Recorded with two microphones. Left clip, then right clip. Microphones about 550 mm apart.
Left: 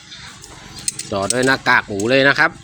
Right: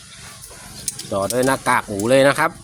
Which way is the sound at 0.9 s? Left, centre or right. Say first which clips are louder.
Even; right.